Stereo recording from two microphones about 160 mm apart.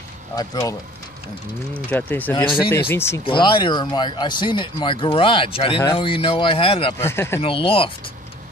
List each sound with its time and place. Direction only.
0.4 s speech: 20° left (ahead or behind)
1.7 s speech: 10° left (ahead or behind)
2.3 s speech: 30° left (ahead or behind)
2.9 s speech: 15° left (ahead or behind)
3.3 s speech: 30° left (ahead or behind)
7.0 s speech: 15° left (ahead or behind)
7.4 s speech: 35° left (ahead or behind)